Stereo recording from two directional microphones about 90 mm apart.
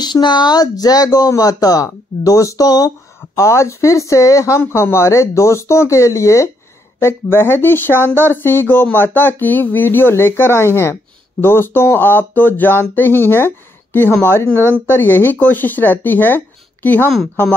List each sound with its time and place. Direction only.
0.0 s speech: 55° left (ahead or behind); by 17.0 s 20° left (ahead or behind)